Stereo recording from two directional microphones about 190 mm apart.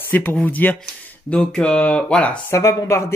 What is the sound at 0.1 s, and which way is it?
Speech, 10° left (ahead or behind).